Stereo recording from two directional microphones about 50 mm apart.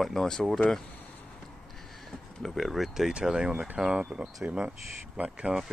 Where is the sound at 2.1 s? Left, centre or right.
Centre.